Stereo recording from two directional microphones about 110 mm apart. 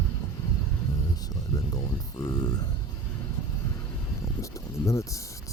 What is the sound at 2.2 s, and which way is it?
Speech, 35° left (ahead or behind).